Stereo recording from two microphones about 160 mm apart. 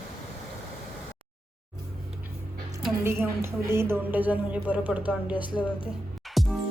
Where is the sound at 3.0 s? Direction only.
15° right (ahead or behind).